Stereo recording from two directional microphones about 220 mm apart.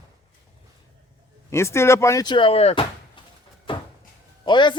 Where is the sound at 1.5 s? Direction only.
10° left (ahead or behind).